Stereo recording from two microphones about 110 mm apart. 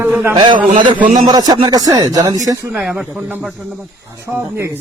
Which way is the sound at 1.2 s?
35° right (ahead or behind).